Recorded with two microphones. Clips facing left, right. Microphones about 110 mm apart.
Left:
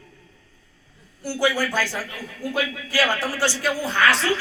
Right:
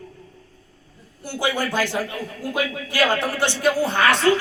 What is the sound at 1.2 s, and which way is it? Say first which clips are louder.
Speech: left 1 dB; 20° right (ahead or behind).